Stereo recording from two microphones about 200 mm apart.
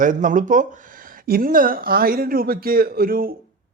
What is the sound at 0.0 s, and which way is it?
Speech, 40° right (ahead or behind).